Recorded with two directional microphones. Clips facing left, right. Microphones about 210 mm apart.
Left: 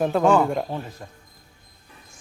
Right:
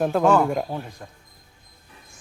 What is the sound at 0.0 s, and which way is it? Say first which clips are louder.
Speech: even; centre (ahead or behind).